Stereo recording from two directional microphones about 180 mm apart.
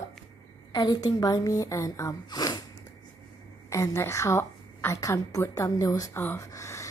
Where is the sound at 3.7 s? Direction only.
15° left (ahead or behind).